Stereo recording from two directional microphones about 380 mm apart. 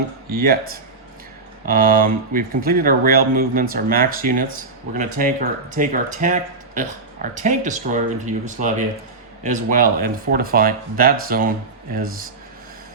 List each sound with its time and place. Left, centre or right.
0.3 s speech: right